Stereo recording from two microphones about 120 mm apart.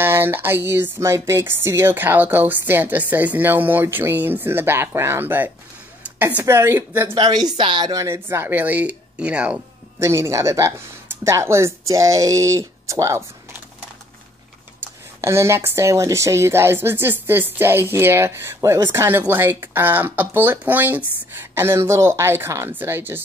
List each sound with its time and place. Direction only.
0.0 s a woman's voice: 15° right (ahead or behind)
7.2 s speech: 35° right (ahead or behind)
8.0 s speech: 20° right (ahead or behind)
9.9 s speech: 20° right (ahead or behind)
14.8 s speech: 20° right (ahead or behind)